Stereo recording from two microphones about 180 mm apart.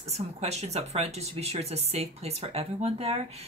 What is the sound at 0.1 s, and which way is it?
Speech, 35° right (ahead or behind).